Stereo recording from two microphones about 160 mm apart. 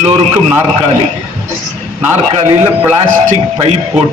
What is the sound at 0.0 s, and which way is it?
Speech, 40° right (ahead or behind).